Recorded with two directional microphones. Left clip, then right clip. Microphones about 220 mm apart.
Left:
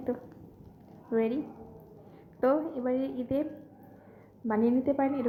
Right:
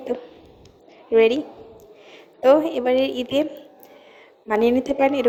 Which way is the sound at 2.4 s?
40° right (ahead or behind).